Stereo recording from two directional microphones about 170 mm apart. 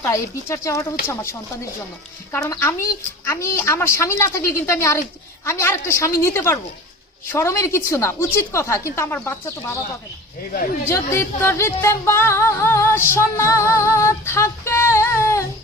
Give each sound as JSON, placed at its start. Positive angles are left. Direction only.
{"t": 0.0, "sound": "speech", "side_deg": 15}
{"t": 10.8, "sound": "speech", "side_deg": 15}